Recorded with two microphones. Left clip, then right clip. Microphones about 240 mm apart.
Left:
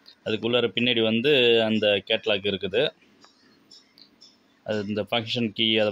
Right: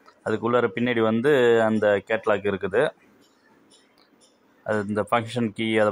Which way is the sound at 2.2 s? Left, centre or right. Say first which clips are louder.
Right 2 dB; right.